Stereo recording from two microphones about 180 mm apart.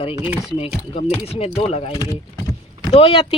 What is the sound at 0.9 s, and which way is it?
Speech, 30° left (ahead or behind).